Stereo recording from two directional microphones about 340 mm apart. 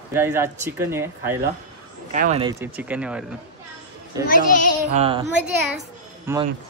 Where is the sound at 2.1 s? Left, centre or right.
Centre.